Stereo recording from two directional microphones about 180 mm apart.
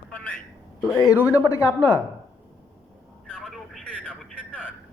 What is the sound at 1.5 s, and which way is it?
Speech, 15° left (ahead or behind).